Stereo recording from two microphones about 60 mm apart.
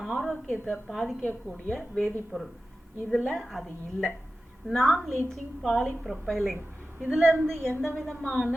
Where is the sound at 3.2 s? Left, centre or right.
Centre.